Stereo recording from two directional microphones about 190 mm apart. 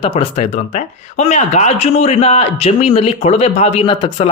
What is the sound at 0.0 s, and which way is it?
A man's voice, 30° left (ahead or behind).